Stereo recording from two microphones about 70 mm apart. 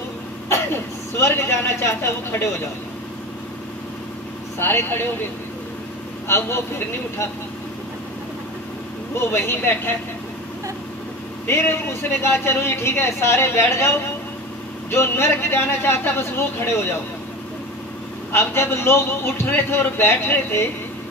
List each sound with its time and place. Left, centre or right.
1.1 s speech: left
4.6 s speech: left
6.2 s speech: left
9.2 s speech: left
11.4 s speech: left
18.3 s speech: left